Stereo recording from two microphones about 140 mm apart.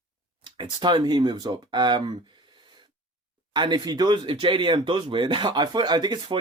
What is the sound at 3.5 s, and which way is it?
Speech, 30° right (ahead or behind).